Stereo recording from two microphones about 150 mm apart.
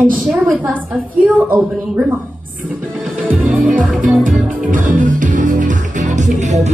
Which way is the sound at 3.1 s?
10° right (ahead or behind).